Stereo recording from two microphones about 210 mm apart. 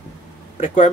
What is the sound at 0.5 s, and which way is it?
Speech, 35° left (ahead or behind).